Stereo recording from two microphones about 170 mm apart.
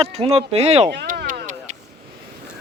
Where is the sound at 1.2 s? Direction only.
50° right (ahead or behind).